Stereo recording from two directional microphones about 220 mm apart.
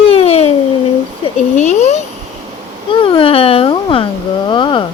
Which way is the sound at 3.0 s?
25° left (ahead or behind).